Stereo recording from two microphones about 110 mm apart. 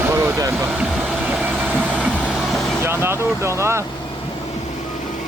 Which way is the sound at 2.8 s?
20° right (ahead or behind).